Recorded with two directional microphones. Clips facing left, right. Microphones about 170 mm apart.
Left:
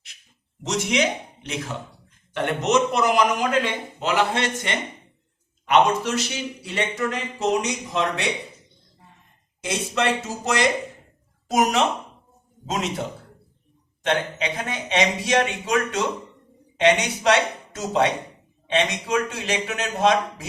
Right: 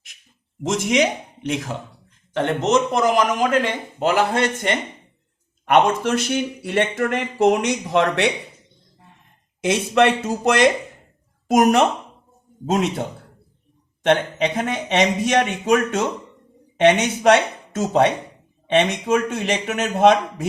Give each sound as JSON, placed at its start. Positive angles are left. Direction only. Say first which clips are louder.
{"t": 0.6, "sound": "a man's voice", "louder": "right 4 dB", "side_deg": -50}
{"t": 2.6, "sound": "a man's voice", "louder": "right 1 dB", "side_deg": -45}
{"t": 6.0, "sound": "speech", "louder": "right 5 dB", "side_deg": -55}
{"t": 9.6, "sound": "speech", "louder": "right 7 dB", "side_deg": -60}
{"t": 14.0, "sound": "a man's voice", "louder": "right 6 dB", "side_deg": -55}